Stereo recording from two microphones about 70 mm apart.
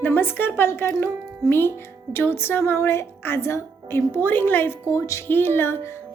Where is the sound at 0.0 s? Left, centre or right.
Left.